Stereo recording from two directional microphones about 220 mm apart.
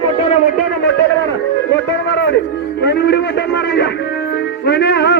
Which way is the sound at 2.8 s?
50° left (ahead or behind).